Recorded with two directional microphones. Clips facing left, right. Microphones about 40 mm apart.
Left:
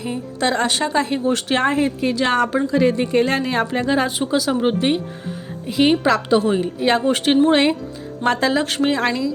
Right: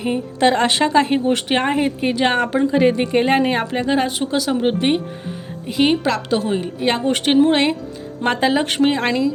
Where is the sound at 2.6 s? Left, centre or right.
Right.